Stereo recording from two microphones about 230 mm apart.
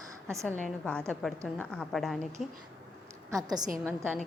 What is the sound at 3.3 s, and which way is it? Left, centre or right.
Speech, centre.